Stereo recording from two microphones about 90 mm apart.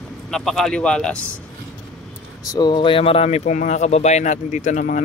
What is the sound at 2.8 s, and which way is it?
Speech, 90° left.